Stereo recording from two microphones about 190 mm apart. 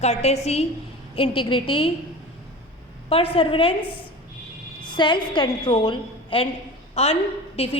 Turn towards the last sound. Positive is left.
turn(degrees=30)  # may be behind; listen again after turning